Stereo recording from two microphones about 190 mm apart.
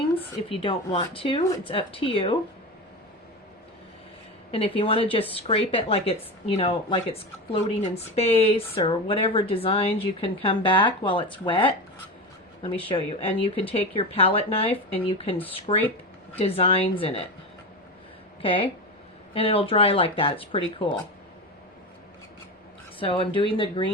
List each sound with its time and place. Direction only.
0.6 s speech: 30° left (ahead or behind)
4.5 s speech: 30° left (ahead or behind)
12.9 s speech: 30° left (ahead or behind)
18.4 s speech: 30° left (ahead or behind)
23.0 s speech: 30° left (ahead or behind)